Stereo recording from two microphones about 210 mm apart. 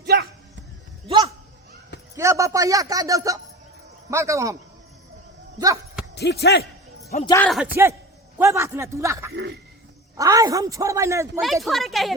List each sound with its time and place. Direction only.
0.0 s a sound: 50° right (ahead or behind)
1.0 s a sound: 20° right (ahead or behind)
2.1 s speech: 15° right (ahead or behind)
5.5 s speech: 15° right (ahead or behind)
6.1 s speech: 50° left (ahead or behind)
7.3 s a man's voice: 10° left (ahead or behind)
7.8 s speech: 10° right (ahead or behind)
9.3 s speech: 50° right (ahead or behind)
10.2 s speech: 15° right (ahead or behind)
11.3 s speech: centre (ahead or behind)